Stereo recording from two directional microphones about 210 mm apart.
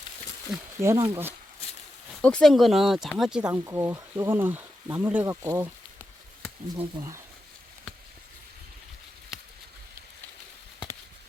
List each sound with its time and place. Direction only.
0.8 s speech: 15° right (ahead or behind)
2.2 s speech: 5° left (ahead or behind)
3.6 s speech: 15° right (ahead or behind)
6.7 s speech: 20° right (ahead or behind)